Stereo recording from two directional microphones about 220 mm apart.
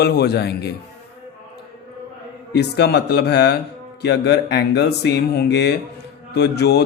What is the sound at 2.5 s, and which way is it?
Speech, 50° left (ahead or behind).